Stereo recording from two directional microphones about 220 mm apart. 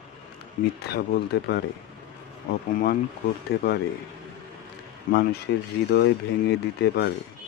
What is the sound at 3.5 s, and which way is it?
Speech, 45° left (ahead or behind).